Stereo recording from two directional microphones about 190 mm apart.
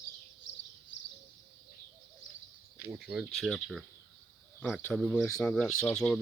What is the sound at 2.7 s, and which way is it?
Speech, 5° right (ahead or behind).